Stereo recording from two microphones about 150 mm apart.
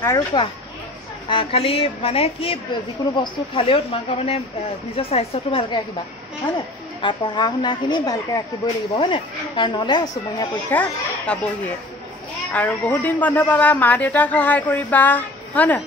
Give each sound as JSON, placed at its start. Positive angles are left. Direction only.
{"t": 0.3, "sound": "a woman's voice", "side_deg": 30}
{"t": 7.0, "sound": "a woman's voice", "side_deg": 30}
{"t": 10.7, "sound": "speech", "side_deg": 10}